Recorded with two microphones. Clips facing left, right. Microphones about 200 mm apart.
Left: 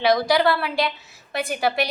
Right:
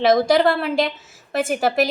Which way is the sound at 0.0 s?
45° right (ahead or behind).